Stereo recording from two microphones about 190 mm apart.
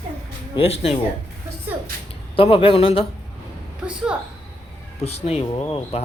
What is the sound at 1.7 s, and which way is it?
Speech, 10° right (ahead or behind).